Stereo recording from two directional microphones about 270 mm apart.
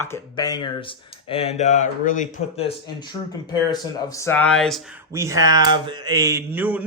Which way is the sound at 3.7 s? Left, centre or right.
Centre.